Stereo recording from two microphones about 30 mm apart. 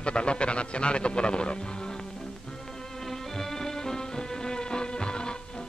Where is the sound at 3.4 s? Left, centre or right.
Centre.